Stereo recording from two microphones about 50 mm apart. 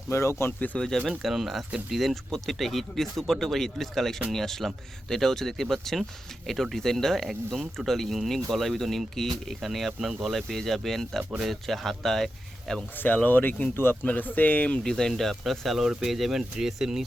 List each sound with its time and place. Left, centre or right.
0.1 s speech: left
0.8 s speech: centre
1.2 s speech: centre
13.0 s speech: left
14.8 s speech: centre